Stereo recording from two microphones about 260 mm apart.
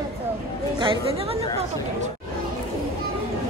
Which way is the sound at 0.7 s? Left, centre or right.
Right.